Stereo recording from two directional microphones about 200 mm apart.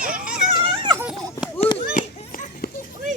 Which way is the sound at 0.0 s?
45° right (ahead or behind).